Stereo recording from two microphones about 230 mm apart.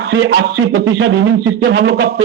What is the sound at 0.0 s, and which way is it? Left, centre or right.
A man's voice, right.